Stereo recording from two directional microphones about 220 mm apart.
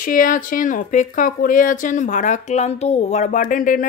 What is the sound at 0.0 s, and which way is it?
Speech, 40° left (ahead or behind).